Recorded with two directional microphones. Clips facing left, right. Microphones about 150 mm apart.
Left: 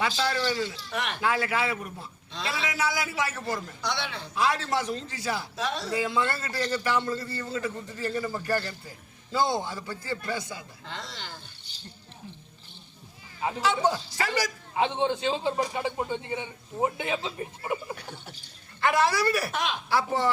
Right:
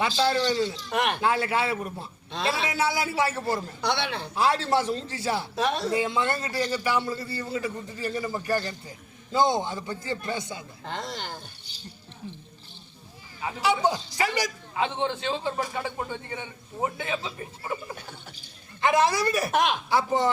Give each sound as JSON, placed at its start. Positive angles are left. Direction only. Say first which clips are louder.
{"t": 0.0, "sound": "a man's voice", "louder": "right 3 dB", "side_deg": -25}
{"t": 0.9, "sound": "speech", "louder": "right 6 dB", "side_deg": -50}
{"t": 1.2, "sound": "a man's voice", "louder": "right 2 dB", "side_deg": -30}
{"t": 3.8, "sound": "speech", "louder": "right 5 dB", "side_deg": -60}
{"t": 4.4, "sound": "a man's voice", "louder": "right 3 dB", "side_deg": -30}
{"t": 5.5, "sound": "speech", "louder": "right 5 dB", "side_deg": -55}
{"t": 5.9, "sound": "a man's voice", "louder": "right 2 dB", "side_deg": -20}
{"t": 10.8, "sound": "speech", "louder": "right 7 dB", "side_deg": -50}
{"t": 13.6, "sound": "a man's voice", "louder": "right 2 dB", "side_deg": -15}
{"t": 14.8, "sound": "a man's voice", "louder": "left 2 dB", "side_deg": 15}
{"t": 18.8, "sound": "a man's voice", "louder": "right 2 dB", "side_deg": -20}
{"t": 19.5, "sound": "speech", "louder": "right 6 dB", "side_deg": -50}
{"t": 19.9, "sound": "a man's voice", "louder": "left 1 dB", "side_deg": -20}